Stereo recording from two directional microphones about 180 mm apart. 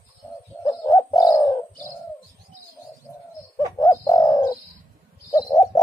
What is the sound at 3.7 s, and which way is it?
Bird, 20° left (ahead or behind).